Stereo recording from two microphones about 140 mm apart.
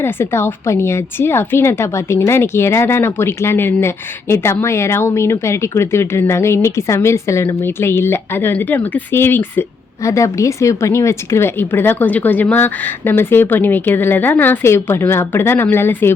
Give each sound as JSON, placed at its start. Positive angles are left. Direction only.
{"t": 0.0, "sound": "a woman's voice", "side_deg": 15}